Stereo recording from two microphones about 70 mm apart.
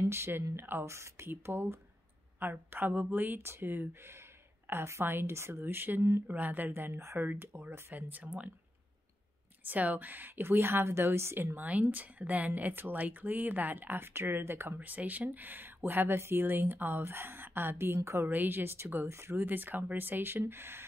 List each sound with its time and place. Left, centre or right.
0.1 s speech: right
9.7 s speech: right
11.5 s speech: right